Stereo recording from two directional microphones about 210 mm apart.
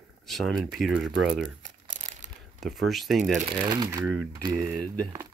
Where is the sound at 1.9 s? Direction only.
35° right (ahead or behind).